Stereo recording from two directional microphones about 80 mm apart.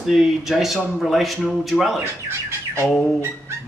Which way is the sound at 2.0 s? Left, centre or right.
Right.